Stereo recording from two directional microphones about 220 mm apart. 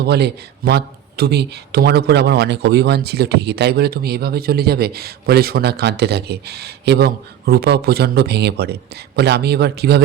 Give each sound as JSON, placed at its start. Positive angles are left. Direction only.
{"t": 0.0, "sound": "speech", "side_deg": -50}